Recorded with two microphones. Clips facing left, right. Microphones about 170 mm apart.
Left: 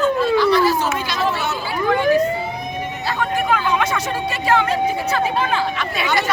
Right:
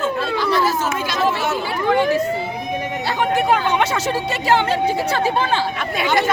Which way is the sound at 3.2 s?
30° right (ahead or behind).